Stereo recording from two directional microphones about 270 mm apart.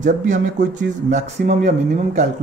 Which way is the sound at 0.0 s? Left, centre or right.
Right.